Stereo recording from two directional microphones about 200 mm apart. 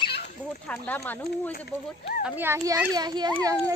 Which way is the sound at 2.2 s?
10° right (ahead or behind).